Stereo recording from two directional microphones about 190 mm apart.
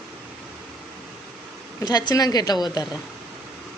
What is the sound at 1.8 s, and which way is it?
Speech, 20° left (ahead or behind).